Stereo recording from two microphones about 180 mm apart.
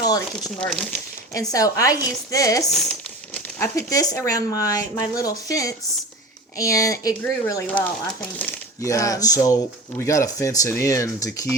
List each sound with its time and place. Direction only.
0.0 s crumpling: 20° left (ahead or behind)
0.6 s speech: 5° left (ahead or behind)
1.3 s speech: 20° left (ahead or behind)
2.7 s crumpling: 5° left (ahead or behind)
3.8 s speech: 20° left (ahead or behind)